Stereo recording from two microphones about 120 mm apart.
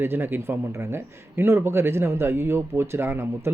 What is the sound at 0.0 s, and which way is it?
Speech, 20° right (ahead or behind).